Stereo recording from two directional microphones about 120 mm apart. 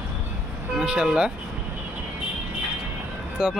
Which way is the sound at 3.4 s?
5° right (ahead or behind).